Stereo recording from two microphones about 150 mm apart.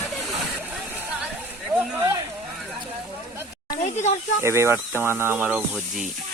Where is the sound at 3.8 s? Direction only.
50° left (ahead or behind).